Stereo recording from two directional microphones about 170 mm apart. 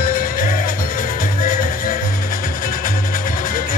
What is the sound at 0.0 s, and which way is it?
Music, 55° left (ahead or behind).